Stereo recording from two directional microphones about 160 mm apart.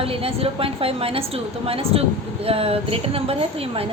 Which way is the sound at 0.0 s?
35° right (ahead or behind).